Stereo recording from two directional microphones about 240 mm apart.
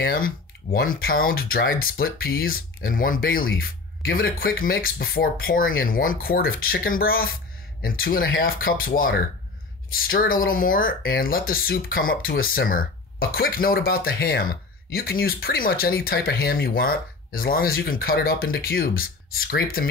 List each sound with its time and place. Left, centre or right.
0.0 s speech: left